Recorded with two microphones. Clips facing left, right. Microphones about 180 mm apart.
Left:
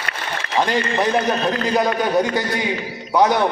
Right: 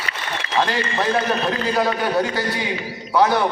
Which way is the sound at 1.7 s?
15° left (ahead or behind).